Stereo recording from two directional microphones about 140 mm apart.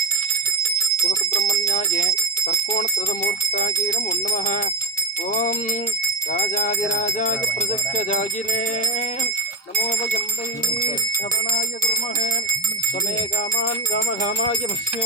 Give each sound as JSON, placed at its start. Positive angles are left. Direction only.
{"t": 1.0, "sound": "bicycle bell", "side_deg": 60}
{"t": 1.7, "sound": "speech", "side_deg": 60}
{"t": 5.3, "sound": "music", "side_deg": 60}